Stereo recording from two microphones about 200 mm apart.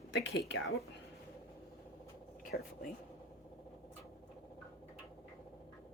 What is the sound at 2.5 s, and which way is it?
Speech, 55° left (ahead or behind).